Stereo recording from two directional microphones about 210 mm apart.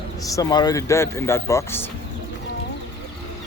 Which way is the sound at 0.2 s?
15° left (ahead or behind).